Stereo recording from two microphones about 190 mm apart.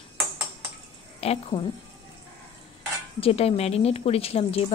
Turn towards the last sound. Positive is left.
turn(degrees=30)  # may be behind; listen again after turning